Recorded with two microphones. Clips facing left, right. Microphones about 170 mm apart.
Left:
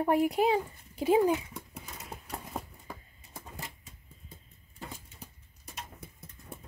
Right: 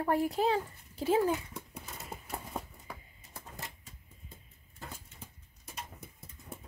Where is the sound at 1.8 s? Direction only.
5° right (ahead or behind).